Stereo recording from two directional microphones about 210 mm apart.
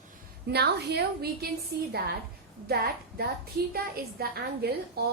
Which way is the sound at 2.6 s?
45° right (ahead or behind).